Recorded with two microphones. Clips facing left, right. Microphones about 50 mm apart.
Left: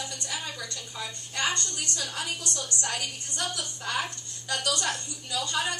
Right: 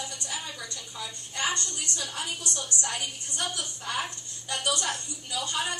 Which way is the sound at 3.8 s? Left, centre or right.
Left.